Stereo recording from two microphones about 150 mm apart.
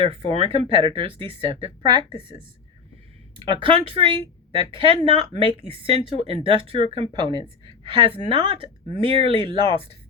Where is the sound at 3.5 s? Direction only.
35° right (ahead or behind).